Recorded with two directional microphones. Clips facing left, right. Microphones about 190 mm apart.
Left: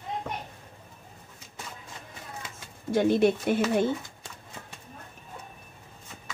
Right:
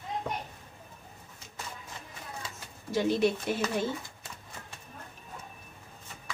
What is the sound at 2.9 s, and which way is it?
Speech, 55° left (ahead or behind).